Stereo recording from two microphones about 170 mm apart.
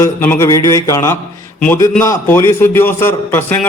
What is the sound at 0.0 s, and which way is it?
A man's voice, 15° left (ahead or behind).